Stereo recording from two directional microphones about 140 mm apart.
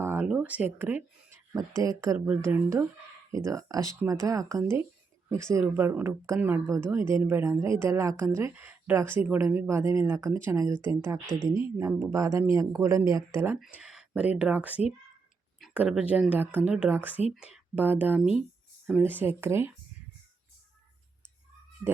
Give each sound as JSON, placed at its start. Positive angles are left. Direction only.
{"t": 0.0, "sound": "a sound", "side_deg": -15}
{"t": 0.3, "sound": "speech", "side_deg": -10}
{"t": 1.3, "sound": "speech", "side_deg": -25}
{"t": 2.1, "sound": "speech", "side_deg": -10}
{"t": 13.6, "sound": "speech", "side_deg": -5}